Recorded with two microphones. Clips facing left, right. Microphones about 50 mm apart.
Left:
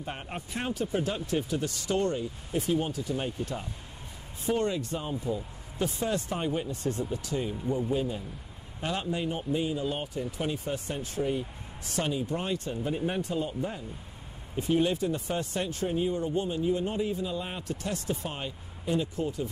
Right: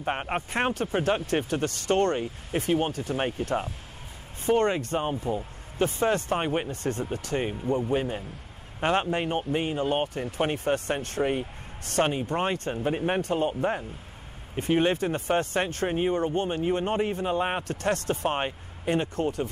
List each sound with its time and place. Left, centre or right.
0.0 s speech: right